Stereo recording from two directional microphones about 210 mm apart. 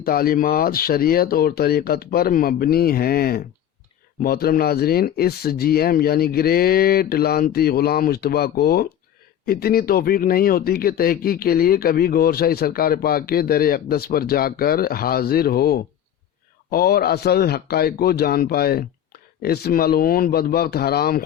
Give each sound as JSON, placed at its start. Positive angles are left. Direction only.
{"t": 0.0, "sound": "speech", "side_deg": 45}